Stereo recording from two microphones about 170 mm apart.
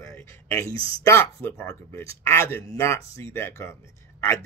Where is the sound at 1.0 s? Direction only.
15° left (ahead or behind).